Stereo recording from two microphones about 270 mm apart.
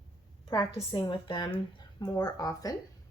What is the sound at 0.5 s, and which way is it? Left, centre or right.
A woman's voice, centre.